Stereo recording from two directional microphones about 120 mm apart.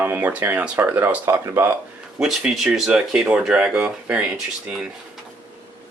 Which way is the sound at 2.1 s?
5° right (ahead or behind).